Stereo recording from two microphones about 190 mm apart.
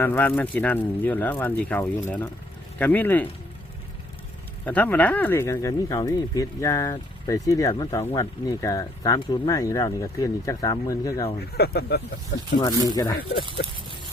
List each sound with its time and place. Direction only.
0.0 s speech: 10° left (ahead or behind)
4.6 s speech: 10° left (ahead or behind)
11.3 s speech: 55° left (ahead or behind)
12.9 s speech: 20° left (ahead or behind)